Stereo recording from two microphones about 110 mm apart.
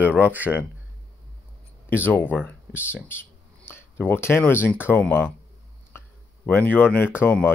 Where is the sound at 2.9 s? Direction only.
20° left (ahead or behind).